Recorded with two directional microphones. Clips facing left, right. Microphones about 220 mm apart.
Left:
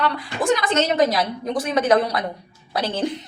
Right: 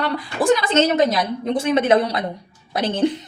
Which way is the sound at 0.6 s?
25° right (ahead or behind).